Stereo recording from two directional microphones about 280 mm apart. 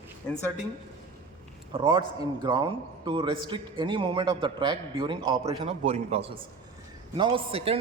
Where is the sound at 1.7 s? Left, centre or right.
Centre.